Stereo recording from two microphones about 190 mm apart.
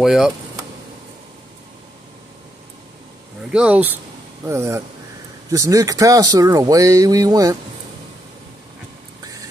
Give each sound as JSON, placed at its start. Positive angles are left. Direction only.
{"t": 0.0, "sound": "speech", "side_deg": 0}
{"t": 3.5, "sound": "speech", "side_deg": -5}